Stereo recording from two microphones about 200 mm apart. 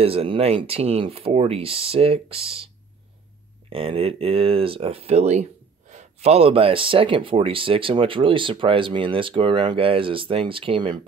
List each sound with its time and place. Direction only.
0.0 s speech: 30° right (ahead or behind)
3.7 s speech: 30° right (ahead or behind)